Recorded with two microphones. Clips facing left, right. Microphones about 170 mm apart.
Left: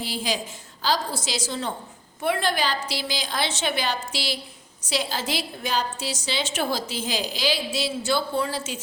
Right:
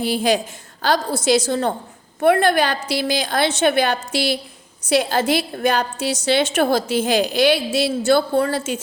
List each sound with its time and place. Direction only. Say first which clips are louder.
0.0 s a woman's voice: right 10 dB; 60° right (ahead or behind)